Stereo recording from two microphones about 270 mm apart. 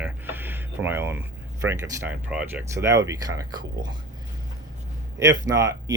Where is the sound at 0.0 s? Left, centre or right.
Centre.